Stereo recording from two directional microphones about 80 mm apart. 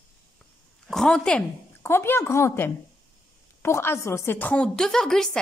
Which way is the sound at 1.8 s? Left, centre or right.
Left.